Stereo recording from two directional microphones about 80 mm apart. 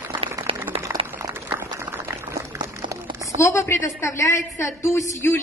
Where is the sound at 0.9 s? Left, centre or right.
Right.